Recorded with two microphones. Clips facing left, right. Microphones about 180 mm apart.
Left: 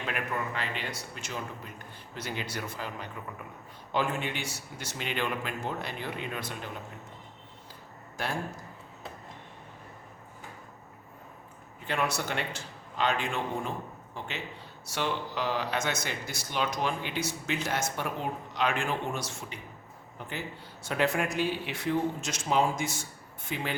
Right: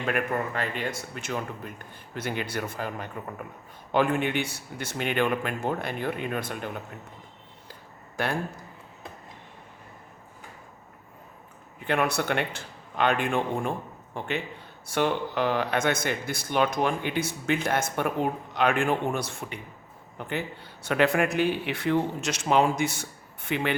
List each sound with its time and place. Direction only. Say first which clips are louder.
0.0 s a man's voice: right 6 dB; 50° right (ahead or behind)
8.1 s speech: right 5 dB; 60° right (ahead or behind)
11.9 s speech: right 5 dB; 60° right (ahead or behind)